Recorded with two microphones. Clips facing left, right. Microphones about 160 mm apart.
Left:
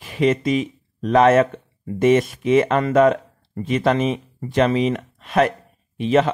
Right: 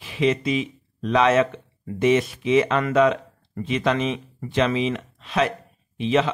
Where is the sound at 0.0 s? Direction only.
45° left (ahead or behind).